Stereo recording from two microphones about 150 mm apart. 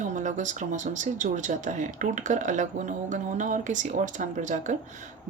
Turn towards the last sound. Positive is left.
turn(degrees=-55)  # may be behind; listen again after turning